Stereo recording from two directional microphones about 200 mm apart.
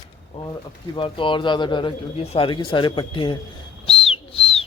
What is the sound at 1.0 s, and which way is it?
Speech, 25° left (ahead or behind).